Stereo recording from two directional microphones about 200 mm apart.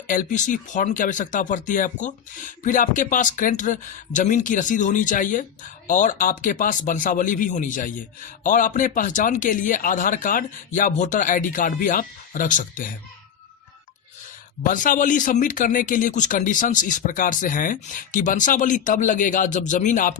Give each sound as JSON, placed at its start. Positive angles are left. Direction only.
{"t": 0.1, "sound": "speech", "side_deg": 40}
{"t": 14.6, "sound": "speech", "side_deg": 40}